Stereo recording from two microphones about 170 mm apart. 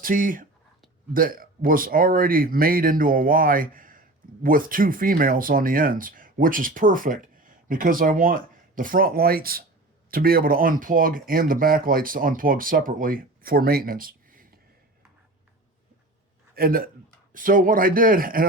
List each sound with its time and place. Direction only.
0.0 s speech: 55° right (ahead or behind)
16.6 s speech: 60° right (ahead or behind)